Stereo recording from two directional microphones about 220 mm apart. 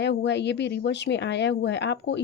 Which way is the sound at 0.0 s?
50° left (ahead or behind).